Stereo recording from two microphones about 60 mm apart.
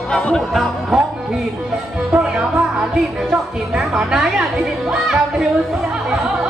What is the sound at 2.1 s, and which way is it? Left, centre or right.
Music, centre.